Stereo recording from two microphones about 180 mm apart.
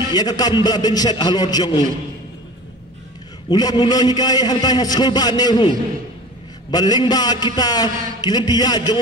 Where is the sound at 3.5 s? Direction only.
20° left (ahead or behind).